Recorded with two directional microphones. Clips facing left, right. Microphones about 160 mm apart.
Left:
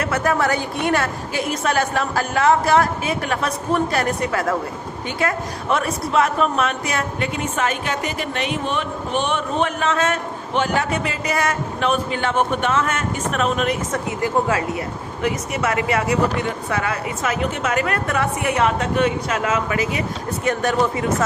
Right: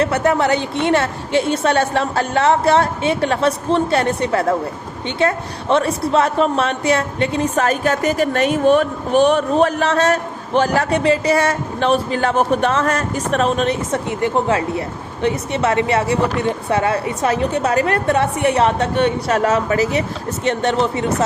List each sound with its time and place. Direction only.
0.0 s a woman's voice: 25° right (ahead or behind)